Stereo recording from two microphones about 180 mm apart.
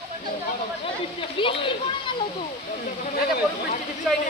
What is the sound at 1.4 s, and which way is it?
Speech, 30° left (ahead or behind).